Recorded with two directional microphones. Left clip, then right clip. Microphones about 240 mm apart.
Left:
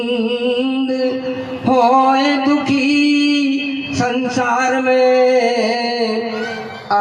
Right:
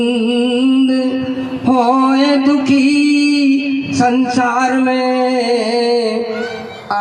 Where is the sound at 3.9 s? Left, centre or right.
Right.